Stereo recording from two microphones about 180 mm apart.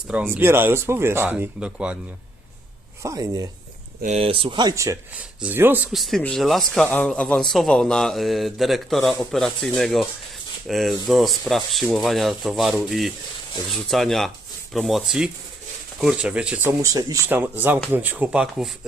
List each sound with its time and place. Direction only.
0.1 s speech: 10° right (ahead or behind)
3.0 s speech: 20° right (ahead or behind)
4.0 s a man's voice: 35° right (ahead or behind); by 16.7 s 5° right (ahead or behind)
16.8 s speech: 20° right (ahead or behind)